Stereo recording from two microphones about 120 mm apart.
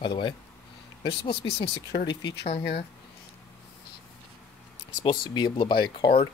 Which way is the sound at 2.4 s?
50° left (ahead or behind).